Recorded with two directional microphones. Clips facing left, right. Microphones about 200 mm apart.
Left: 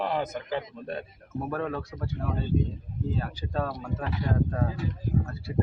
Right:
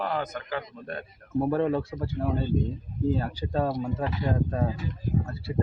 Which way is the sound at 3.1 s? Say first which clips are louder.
Right 3 dB; 30° right (ahead or behind).